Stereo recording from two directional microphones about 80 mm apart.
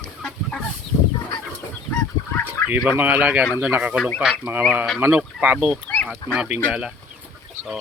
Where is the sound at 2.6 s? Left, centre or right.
Left.